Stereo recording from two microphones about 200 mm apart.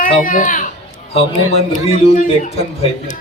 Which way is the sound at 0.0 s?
45° left (ahead or behind).